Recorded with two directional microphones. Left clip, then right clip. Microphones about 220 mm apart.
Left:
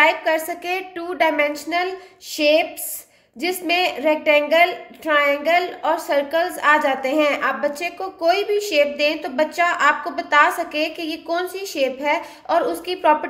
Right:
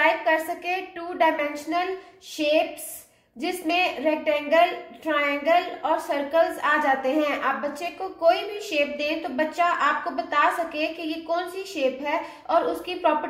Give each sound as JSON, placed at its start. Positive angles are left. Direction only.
{"t": 0.0, "sound": "a woman's voice", "side_deg": 40}